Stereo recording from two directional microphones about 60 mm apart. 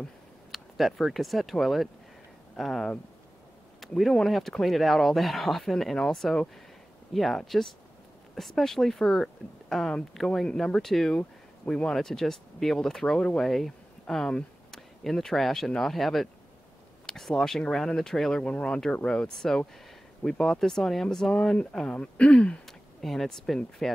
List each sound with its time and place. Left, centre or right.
0.5 s speech: centre
22.7 s speech: centre